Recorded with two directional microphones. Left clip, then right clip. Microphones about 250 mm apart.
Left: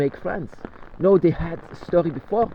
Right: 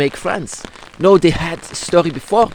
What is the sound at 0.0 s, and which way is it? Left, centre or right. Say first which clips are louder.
Speech: right 7 dB; right.